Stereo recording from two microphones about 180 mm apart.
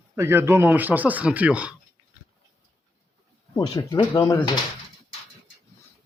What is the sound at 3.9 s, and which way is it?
Speech, 20° left (ahead or behind).